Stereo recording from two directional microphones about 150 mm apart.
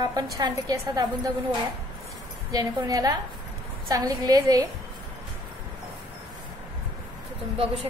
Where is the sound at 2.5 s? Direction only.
25° right (ahead or behind).